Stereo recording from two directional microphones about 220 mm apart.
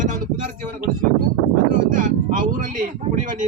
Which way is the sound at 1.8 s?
35° right (ahead or behind).